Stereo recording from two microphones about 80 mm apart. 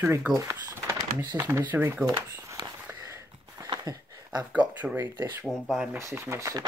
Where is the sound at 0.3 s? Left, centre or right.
Right.